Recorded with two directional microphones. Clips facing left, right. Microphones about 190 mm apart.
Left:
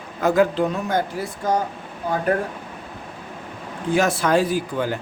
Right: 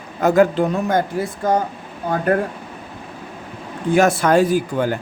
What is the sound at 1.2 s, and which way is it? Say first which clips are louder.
Speech: right 5 dB; 55° right (ahead or behind).